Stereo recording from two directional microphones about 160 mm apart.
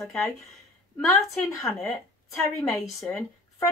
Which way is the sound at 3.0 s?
15° left (ahead or behind).